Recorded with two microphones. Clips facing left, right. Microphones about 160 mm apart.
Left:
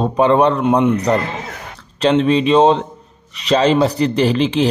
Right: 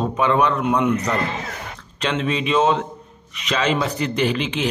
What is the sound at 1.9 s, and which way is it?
A man's voice, 35° left (ahead or behind).